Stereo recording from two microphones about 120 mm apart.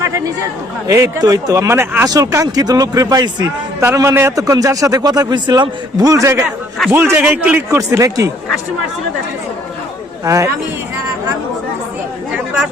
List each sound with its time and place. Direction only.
0.9 s a man's voice: 30° right (ahead or behind)
2.0 s a man's voice: 30° right (ahead or behind)
7.8 s a man's voice: 25° right (ahead or behind)
10.2 s a man's voice: 25° right (ahead or behind)